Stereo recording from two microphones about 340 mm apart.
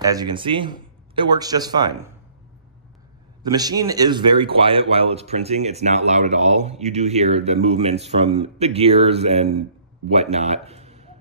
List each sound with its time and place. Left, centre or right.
0.0 s speech: centre
3.4 s a man's voice: centre